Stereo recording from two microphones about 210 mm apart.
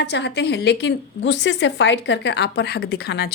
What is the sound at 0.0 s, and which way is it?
A woman's voice, 55° left (ahead or behind).